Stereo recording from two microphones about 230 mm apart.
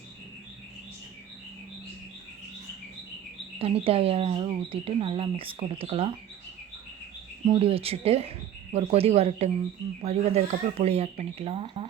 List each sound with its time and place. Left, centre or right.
3.6 s speech: right
7.4 s speech: right